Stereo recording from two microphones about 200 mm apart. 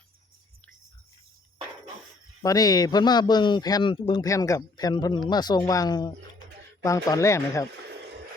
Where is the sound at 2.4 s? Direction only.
20° left (ahead or behind).